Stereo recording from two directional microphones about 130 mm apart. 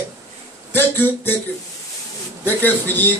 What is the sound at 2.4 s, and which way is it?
Speech, 15° left (ahead or behind).